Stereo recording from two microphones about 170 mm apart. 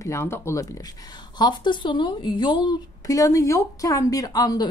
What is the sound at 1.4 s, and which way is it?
Speech, 25° left (ahead or behind).